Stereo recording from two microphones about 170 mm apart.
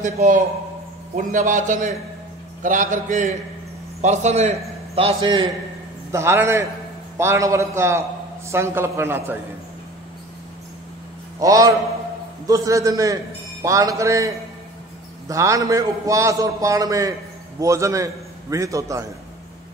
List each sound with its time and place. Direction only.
0.0 s a man's voice: 45° right (ahead or behind)
6.1 s a man's voice: 15° right (ahead or behind)
11.3 s a man's voice: 20° right (ahead or behind)